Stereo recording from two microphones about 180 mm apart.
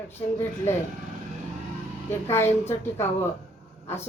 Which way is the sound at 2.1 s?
15° left (ahead or behind).